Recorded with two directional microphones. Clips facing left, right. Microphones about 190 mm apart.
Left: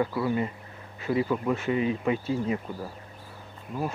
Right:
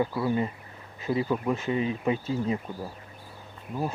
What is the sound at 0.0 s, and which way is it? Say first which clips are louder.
Speech: even; 20° right (ahead or behind).